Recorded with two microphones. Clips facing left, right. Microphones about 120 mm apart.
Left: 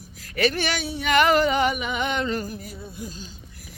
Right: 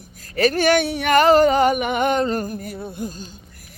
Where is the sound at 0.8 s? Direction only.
65° right (ahead or behind).